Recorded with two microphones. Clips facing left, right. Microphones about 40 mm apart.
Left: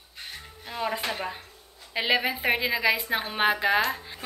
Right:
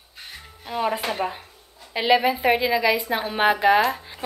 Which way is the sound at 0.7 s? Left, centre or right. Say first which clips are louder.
Right 5 dB; centre.